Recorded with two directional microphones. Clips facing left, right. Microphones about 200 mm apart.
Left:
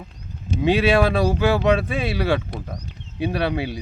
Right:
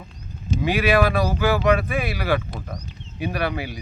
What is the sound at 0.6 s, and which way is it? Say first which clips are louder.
Speech: left 2 dB; 25° left (ahead or behind).